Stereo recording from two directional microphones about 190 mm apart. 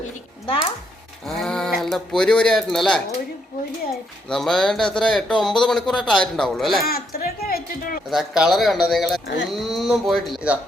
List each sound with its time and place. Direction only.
1.3 s a sound: centre (ahead or behind)
1.8 s a man's voice: 5° left (ahead or behind)
4.3 s a man's voice: 5° left (ahead or behind)
6.8 s a sound: 50° left (ahead or behind)
8.1 s a man's voice: centre (ahead or behind)
9.2 s speech: 70° left (ahead or behind)
9.5 s a man's voice: centre (ahead or behind)